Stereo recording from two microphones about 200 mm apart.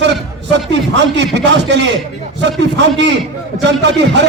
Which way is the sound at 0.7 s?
60° right (ahead or behind).